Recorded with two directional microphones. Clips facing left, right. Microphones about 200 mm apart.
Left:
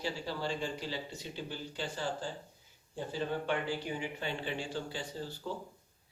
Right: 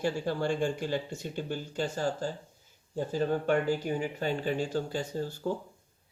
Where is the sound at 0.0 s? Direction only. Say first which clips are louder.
Right 7 dB; 50° right (ahead or behind).